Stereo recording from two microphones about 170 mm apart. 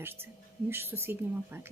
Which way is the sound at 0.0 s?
15° right (ahead or behind).